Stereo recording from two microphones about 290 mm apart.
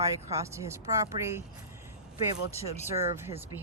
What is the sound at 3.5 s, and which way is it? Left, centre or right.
Speech, centre.